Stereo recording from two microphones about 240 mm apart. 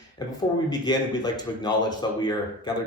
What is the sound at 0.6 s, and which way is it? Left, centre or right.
Speech, centre.